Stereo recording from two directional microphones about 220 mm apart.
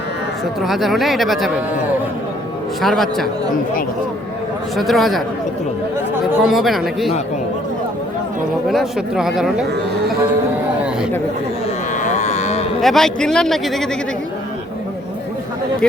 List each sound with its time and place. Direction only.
0.6 s speech: centre (ahead or behind)
2.8 s speech: centre (ahead or behind)
4.8 s speech: centre (ahead or behind)
6.4 s speech: centre (ahead or behind)
8.7 s speech: centre (ahead or behind)
12.0 s a sound: 30° left (ahead or behind)
12.8 s speech: centre (ahead or behind)
15.8 s speech: 5° left (ahead or behind)